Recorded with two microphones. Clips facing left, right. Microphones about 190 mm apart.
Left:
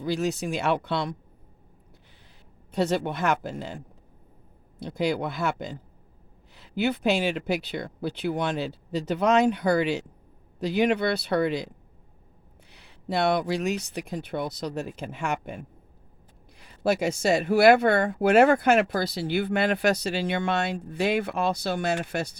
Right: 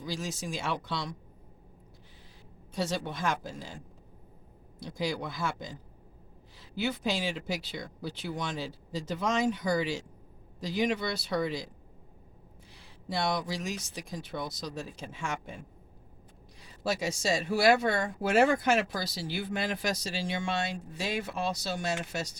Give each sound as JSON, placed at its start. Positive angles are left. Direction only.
{"t": 0.0, "sound": "speech", "side_deg": 65}
{"t": 2.7, "sound": "speech", "side_deg": 60}
{"t": 4.8, "sound": "speech", "side_deg": 60}
{"t": 12.7, "sound": "speech", "side_deg": 65}